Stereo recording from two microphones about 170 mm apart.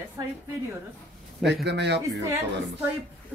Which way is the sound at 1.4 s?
85° right.